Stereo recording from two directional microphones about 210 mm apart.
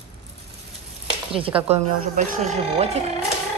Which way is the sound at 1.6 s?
35° right (ahead or behind).